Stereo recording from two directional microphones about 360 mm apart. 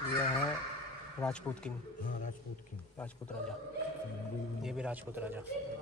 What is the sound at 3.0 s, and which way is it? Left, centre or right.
Speech, centre.